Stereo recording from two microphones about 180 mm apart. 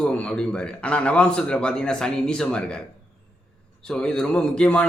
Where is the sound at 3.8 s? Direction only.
5° left (ahead or behind).